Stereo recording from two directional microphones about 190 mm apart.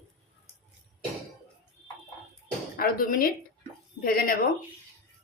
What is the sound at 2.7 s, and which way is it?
Speech, 50° left (ahead or behind).